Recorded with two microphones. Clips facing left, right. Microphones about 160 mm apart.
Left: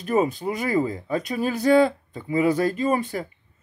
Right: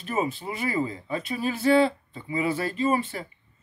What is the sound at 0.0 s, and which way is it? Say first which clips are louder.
A woman's voice: left 6 dB; 40° left (ahead or behind).